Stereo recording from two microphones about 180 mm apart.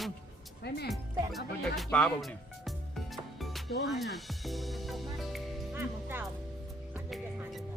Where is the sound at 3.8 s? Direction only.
Centre (ahead or behind).